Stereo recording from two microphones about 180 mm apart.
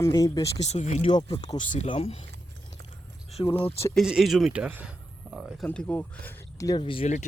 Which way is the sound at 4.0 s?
Centre (ahead or behind).